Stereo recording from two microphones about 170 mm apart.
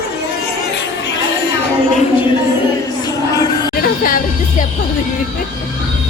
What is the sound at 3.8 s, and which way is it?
Music, 55° left (ahead or behind).